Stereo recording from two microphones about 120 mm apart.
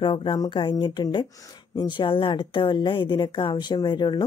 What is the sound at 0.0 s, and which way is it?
Speech, 45° left (ahead or behind).